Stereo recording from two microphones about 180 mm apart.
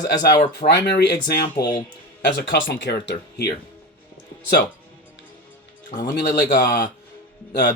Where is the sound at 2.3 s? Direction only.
65° left (ahead or behind).